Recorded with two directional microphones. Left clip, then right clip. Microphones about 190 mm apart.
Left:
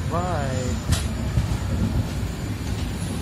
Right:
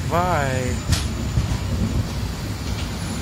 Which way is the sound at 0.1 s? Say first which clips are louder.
Right 6 dB; 15° right (ahead or behind).